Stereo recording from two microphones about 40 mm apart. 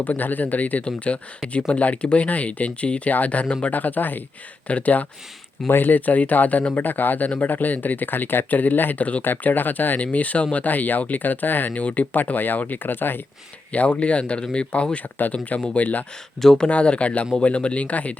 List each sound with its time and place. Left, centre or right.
0.0 s speech: left
5.6 s speech: left
8.4 s speech: left
11.7 s speech: left
13.7 s speech: left
16.4 s speech: centre
16.6 s speech: left